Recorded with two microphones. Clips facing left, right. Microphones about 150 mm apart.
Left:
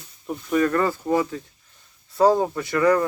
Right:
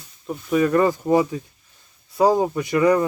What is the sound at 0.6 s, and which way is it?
Speech, 15° right (ahead or behind).